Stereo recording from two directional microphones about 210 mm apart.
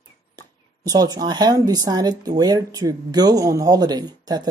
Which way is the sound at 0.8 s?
20° right (ahead or behind).